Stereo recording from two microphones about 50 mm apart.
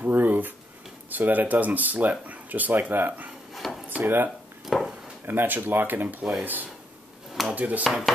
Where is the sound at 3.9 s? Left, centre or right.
Right.